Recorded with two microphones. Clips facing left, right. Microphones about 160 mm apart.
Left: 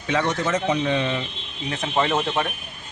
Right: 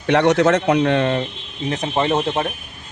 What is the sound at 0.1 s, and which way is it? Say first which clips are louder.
Speech: right 8 dB; 70° right (ahead or behind).